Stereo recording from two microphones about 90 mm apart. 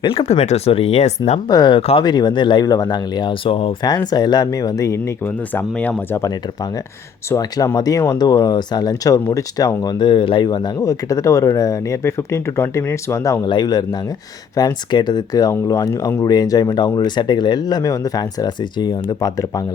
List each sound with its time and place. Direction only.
0.0 s speech: 90° left
1.5 s speech: 55° left (ahead or behind); by 3.8 s 85° left
3.8 s speech: 50° left (ahead or behind); by 5.1 s 35° left (ahead or behind)
5.2 s speech: 20° left (ahead or behind)
7.3 s speech: 40° left (ahead or behind)
13.4 s speech: 50° left (ahead or behind)